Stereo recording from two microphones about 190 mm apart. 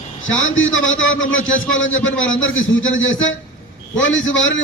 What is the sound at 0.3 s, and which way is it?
A man's voice, 90° left.